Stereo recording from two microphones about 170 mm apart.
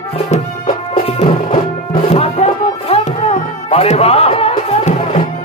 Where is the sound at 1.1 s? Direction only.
45° left (ahead or behind).